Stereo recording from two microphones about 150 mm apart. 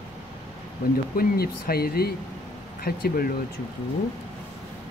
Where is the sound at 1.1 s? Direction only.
90° left.